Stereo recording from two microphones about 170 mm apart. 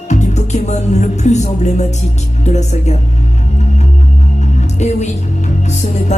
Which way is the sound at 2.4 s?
40° left (ahead or behind).